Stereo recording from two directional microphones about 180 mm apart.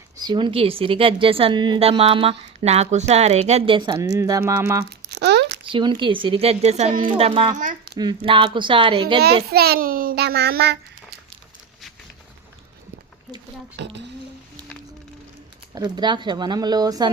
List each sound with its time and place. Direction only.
0.2 s a woman's voice: 25° right (ahead or behind)
3.8 s speech: 20° right (ahead or behind)
4.2 s music: 15° right (ahead or behind)
5.0 s a sound: 65° right (ahead or behind)
5.7 s a woman's voice: 30° right (ahead or behind)
7.6 s speech: 45° right (ahead or behind)
7.9 s speech: 25° right (ahead or behind)
9.5 s a child's voice: 60° right (ahead or behind)
13.7 s a child's voice: 80° right
15.7 s speech: 25° right (ahead or behind)